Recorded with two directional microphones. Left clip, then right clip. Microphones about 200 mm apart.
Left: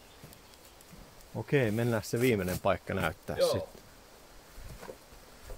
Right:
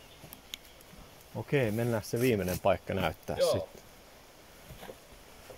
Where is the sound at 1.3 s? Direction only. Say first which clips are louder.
Left 1 dB; 15° left (ahead or behind).